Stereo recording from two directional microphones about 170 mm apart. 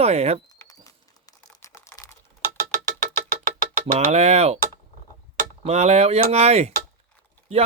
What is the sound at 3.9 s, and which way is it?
Speech, 40° right (ahead or behind).